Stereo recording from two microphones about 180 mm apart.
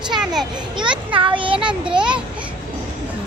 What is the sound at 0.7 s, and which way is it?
Speech, 25° right (ahead or behind).